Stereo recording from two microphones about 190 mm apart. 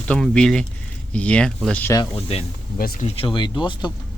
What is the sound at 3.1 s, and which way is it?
Speech, 30° left (ahead or behind).